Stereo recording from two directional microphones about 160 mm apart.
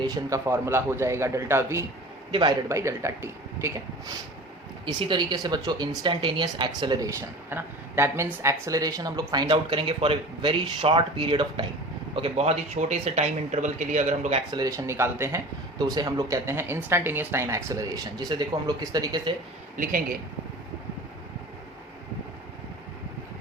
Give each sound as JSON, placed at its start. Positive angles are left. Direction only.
{"t": 0.0, "sound": "a man's voice", "side_deg": -20}
{"t": 2.3, "sound": "a man's voice", "side_deg": -30}
{"t": 2.6, "sound": "a man's voice", "side_deg": -20}
{"t": 4.9, "sound": "a woman's voice", "side_deg": -30}
{"t": 14.5, "sound": "a man's voice", "side_deg": -20}
{"t": 19.7, "sound": "a man's voice", "side_deg": -60}